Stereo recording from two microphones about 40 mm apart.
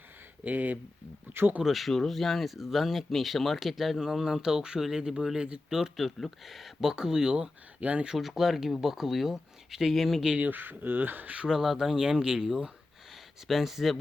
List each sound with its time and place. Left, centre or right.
0.4 s speech: right
1.3 s speech: right
1.6 s speech: centre
4.4 s speech: centre
6.9 s speech: centre
7.8 s speech: right
8.2 s speech: centre
10.4 s speech: right
11.6 s speech: centre
13.5 s speech: centre